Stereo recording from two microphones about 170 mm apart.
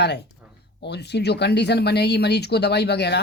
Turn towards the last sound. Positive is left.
turn(degrees=80)